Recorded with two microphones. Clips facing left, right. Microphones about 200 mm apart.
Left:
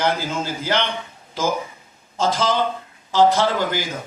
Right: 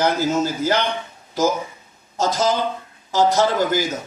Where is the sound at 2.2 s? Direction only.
45° right (ahead or behind).